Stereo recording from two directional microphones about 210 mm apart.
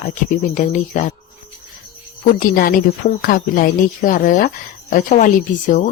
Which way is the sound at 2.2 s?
40° left (ahead or behind).